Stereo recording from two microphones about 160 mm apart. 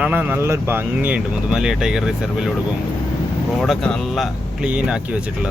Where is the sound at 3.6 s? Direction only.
Centre (ahead or behind).